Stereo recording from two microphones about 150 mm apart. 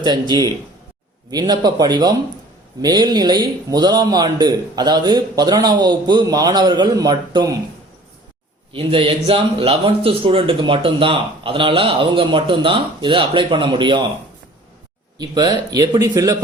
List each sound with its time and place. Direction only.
0.0 s a man's voice: 25° right (ahead or behind)
8.7 s speech: 35° right (ahead or behind)
15.2 s a man's voice: 25° right (ahead or behind)